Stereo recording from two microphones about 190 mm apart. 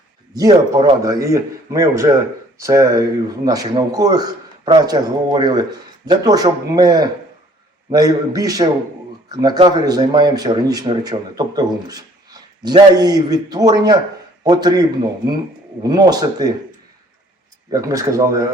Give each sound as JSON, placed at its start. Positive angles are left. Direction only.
{"t": 0.3, "sound": "speech", "side_deg": -20}
{"t": 17.7, "sound": "speech", "side_deg": -15}